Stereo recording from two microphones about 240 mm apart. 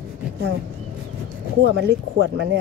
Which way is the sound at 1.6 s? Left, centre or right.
Right.